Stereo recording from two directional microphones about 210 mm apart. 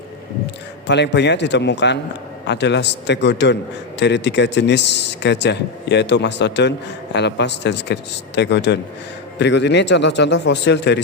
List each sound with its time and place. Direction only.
0.9 s speech: 55° left (ahead or behind)